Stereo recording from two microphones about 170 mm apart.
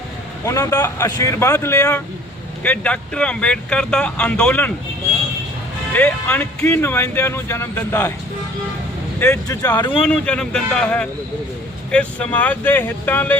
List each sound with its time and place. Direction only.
0.4 s speech: 20° left (ahead or behind)
5.9 s speech: 10° left (ahead or behind)
9.2 s speech: 15° left (ahead or behind)
10.0 s speech: 5° left (ahead or behind)